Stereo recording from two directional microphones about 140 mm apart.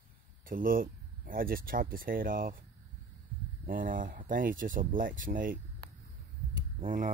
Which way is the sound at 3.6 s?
80° right.